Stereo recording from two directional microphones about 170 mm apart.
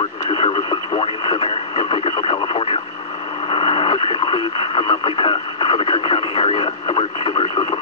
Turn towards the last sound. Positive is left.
turn(degrees=25)  # may be behind; listen again after turning